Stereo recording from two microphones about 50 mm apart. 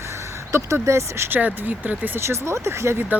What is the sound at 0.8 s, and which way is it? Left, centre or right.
Speech, right.